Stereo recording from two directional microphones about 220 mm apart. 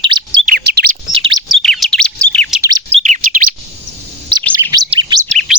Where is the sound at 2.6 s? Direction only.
15° right (ahead or behind).